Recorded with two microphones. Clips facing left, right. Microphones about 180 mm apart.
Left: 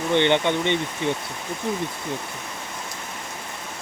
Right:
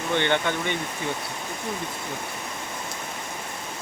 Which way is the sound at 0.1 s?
20° left (ahead or behind).